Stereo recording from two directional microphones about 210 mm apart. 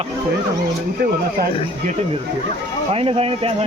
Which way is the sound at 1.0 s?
50° right (ahead or behind).